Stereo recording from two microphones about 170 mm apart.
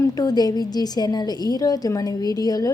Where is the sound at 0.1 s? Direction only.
20° left (ahead or behind).